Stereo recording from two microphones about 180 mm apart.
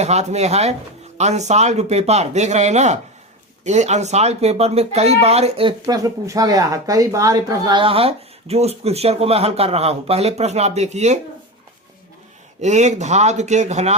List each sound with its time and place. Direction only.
0.0 s speech: 40° right (ahead or behind)
5.8 s speech: 20° right (ahead or behind); by 11.2 s 40° right (ahead or behind)
12.6 s speech: 40° right (ahead or behind)